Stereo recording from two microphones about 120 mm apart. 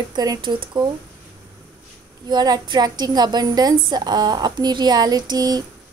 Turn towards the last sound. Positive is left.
turn(degrees=-35)  # may be behind; listen again after turning